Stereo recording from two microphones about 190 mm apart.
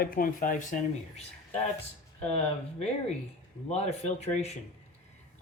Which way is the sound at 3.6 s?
35° left (ahead or behind).